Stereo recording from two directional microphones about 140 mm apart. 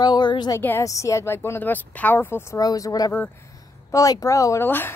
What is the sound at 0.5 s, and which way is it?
Speech, 20° left (ahead or behind).